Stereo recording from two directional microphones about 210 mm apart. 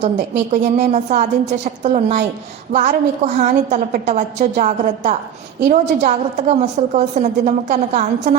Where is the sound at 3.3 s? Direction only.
35° right (ahead or behind).